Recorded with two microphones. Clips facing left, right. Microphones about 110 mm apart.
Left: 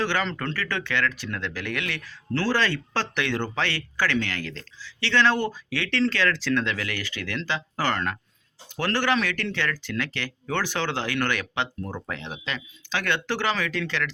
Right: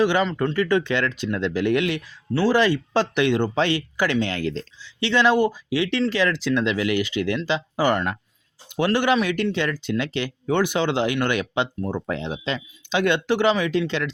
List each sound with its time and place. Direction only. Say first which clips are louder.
0.0 s speech: right 7 dB; 15° right (ahead or behind)